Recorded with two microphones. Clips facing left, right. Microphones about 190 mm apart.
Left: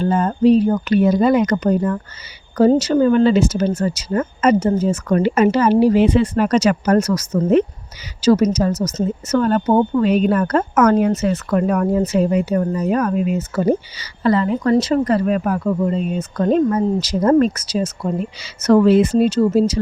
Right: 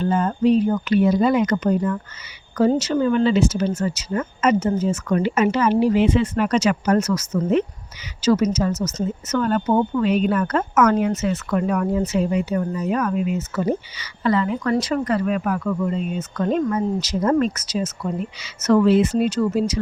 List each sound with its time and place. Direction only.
0.0 s speech: 40° left (ahead or behind)
11.5 s speech: 45° left (ahead or behind)
19.1 s speech: 30° left (ahead or behind)